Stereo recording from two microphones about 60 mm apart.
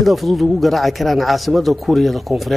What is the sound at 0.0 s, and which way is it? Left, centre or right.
A man's voice, centre.